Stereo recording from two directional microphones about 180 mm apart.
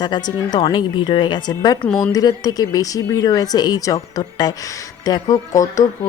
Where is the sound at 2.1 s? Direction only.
20° left (ahead or behind).